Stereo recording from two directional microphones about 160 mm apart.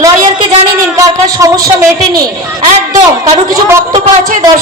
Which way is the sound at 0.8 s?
20° right (ahead or behind).